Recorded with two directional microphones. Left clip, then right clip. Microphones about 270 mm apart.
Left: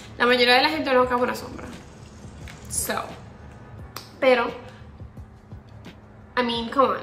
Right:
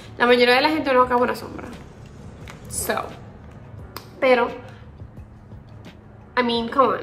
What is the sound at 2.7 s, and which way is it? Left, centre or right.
Speech, centre.